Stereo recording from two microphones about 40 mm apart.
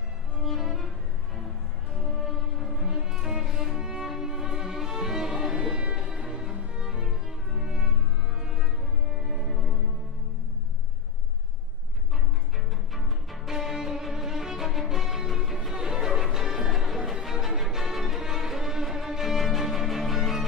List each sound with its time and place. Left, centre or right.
0.4 s music: centre
9.1 s music: centre
12.9 s music: centre